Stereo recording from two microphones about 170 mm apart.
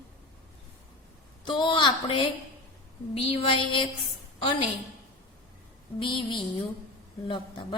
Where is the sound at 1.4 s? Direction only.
30° left (ahead or behind).